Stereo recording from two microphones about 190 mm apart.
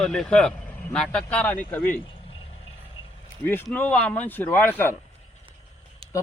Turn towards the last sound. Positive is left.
turn(degrees=-30)  # may be behind; listen again after turning